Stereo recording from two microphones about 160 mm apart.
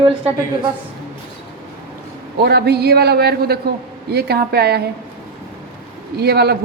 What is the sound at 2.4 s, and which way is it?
A woman's voice, 90° right.